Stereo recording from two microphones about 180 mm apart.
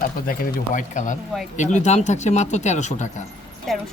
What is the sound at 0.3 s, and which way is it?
Speech, 50° left (ahead or behind).